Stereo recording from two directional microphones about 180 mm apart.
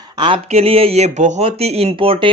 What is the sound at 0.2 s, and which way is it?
Speech, 30° right (ahead or behind).